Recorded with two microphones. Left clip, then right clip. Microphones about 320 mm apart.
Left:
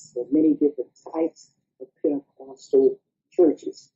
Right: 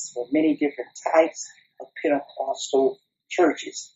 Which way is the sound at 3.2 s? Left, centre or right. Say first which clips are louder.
Left 1 dB; centre.